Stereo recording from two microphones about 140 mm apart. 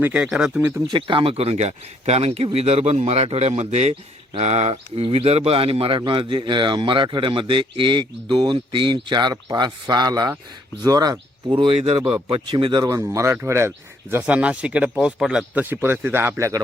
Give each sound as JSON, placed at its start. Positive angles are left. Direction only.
{"t": 0.0, "sound": "speech", "side_deg": -10}
{"t": 0.9, "sound": "speech", "side_deg": -35}
{"t": 11.5, "sound": "speech", "side_deg": -40}
{"t": 12.8, "sound": "speech", "side_deg": -20}